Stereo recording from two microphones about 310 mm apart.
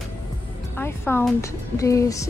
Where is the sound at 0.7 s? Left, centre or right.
Centre.